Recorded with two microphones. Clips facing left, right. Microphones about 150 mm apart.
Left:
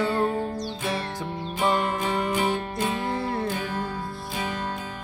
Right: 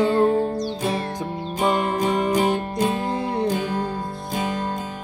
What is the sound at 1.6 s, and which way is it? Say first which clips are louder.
Music: right 3 dB; 45° right (ahead or behind).